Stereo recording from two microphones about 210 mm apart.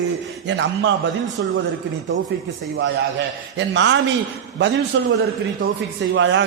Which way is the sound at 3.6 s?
60° right (ahead or behind).